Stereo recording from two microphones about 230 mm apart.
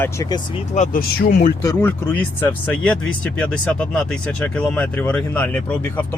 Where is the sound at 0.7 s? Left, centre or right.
Left.